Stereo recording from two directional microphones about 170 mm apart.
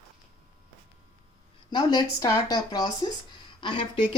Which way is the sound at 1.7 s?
25° left (ahead or behind).